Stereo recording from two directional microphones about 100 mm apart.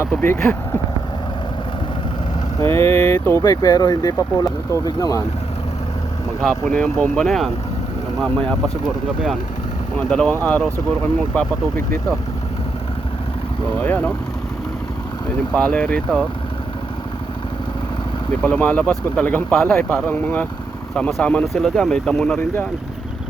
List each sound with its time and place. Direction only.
0.0 s speech: 20° left (ahead or behind)
2.6 s speech: 25° left (ahead or behind)
6.7 s speech: 15° left (ahead or behind)
7.2 s speech: centre (ahead or behind)
10.1 s speech: 10° left (ahead or behind)
13.7 s speech: 15° left (ahead or behind)
15.5 s speech: 10° left (ahead or behind)
18.4 s speech: 15° left (ahead or behind)